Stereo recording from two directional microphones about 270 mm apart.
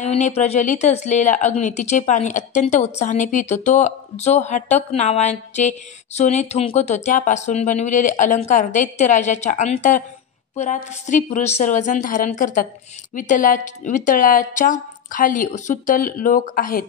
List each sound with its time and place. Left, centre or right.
0.0 s speech: left